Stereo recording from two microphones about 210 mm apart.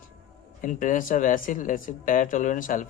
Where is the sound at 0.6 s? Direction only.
40° left (ahead or behind).